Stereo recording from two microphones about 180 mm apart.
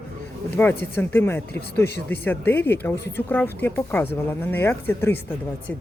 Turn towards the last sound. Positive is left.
turn(degrees=10)  # may be behind; listen again after turning